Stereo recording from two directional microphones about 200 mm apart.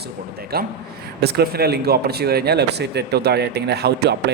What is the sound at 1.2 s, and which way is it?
Speech, 50° right (ahead or behind).